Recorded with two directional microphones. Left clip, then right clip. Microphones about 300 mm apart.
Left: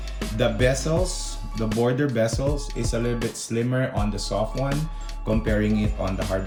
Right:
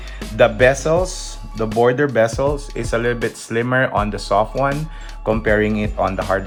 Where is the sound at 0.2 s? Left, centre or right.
Centre.